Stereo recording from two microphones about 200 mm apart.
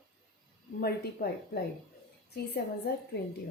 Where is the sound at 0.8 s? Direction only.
50° left (ahead or behind).